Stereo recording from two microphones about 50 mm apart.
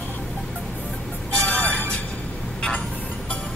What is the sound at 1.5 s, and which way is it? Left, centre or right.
Music, left.